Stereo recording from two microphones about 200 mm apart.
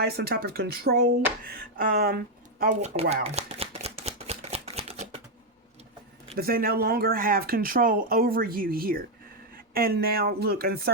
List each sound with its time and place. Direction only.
0.0 s speech: 50° right (ahead or behind)
2.8 s shuffling cards: 30° right (ahead or behind)
6.3 s speech: 50° right (ahead or behind)